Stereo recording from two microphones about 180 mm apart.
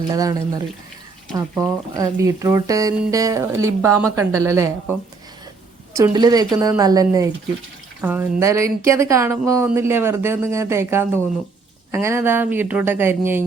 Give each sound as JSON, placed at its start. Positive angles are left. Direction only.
{"t": 0.1, "sound": "speech", "side_deg": -20}